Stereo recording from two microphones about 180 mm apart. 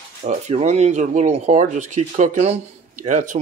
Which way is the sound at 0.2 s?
40° right (ahead or behind).